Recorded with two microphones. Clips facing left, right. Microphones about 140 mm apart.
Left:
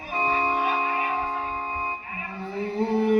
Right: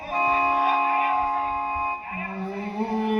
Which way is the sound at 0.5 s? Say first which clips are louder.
Right 3 dB; 40° right (ahead or behind).